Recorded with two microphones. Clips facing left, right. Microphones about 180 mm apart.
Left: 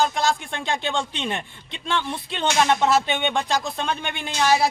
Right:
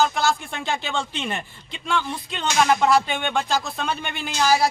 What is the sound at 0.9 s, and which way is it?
Speech, 20° left (ahead or behind).